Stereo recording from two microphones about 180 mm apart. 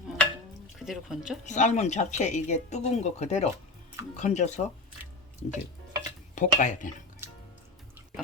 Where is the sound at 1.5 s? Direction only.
40° left (ahead or behind).